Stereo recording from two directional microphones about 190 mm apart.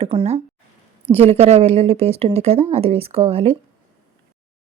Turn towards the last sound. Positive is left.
turn(degrees=-30)  # may be behind; listen again after turning